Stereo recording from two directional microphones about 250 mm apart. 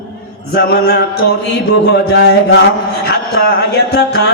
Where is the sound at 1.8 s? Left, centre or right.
Left.